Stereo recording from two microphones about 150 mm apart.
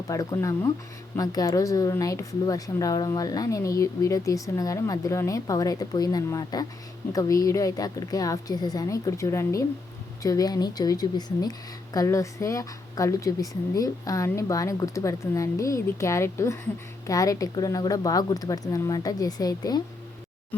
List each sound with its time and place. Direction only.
0.1 s a woman's voice: 20° left (ahead or behind)